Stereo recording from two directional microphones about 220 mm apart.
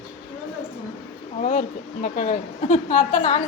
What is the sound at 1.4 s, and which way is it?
Speech, 35° left (ahead or behind).